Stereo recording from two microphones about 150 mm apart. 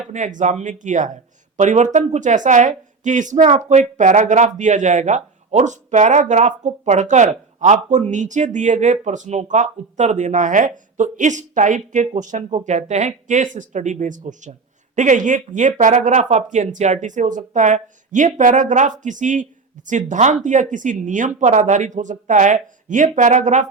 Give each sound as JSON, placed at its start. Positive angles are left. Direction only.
{"t": 0.1, "sound": "speech", "side_deg": -55}